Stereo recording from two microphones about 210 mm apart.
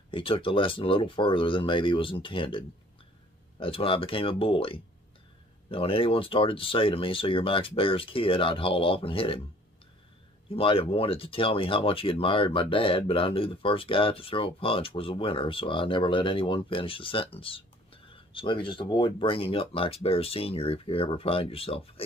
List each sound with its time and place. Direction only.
0.1 s speech: 25° left (ahead or behind)
10.5 s speech: 25° left (ahead or behind)